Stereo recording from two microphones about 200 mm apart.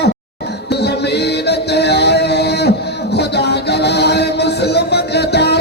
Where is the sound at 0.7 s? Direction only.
55° left (ahead or behind).